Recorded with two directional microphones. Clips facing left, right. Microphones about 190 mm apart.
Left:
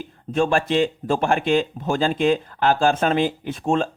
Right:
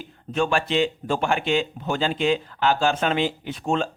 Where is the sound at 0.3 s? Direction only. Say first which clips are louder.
Left 3 dB; 40° left (ahead or behind).